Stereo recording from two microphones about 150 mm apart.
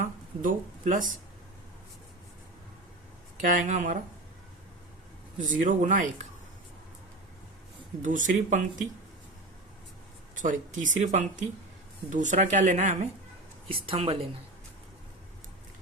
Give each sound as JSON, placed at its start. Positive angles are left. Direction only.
{"t": 0.0, "sound": "speech", "side_deg": -60}
{"t": 3.4, "sound": "speech", "side_deg": -60}
{"t": 5.4, "sound": "speech", "side_deg": -60}
{"t": 8.0, "sound": "speech", "side_deg": -60}
{"t": 10.3, "sound": "speech", "side_deg": -60}
{"t": 13.7, "sound": "speech", "side_deg": -40}